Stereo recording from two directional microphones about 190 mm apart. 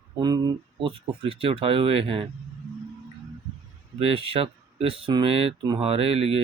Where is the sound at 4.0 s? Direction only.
30° right (ahead or behind).